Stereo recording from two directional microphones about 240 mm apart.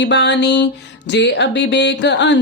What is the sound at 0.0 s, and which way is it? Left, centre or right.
Speech, left.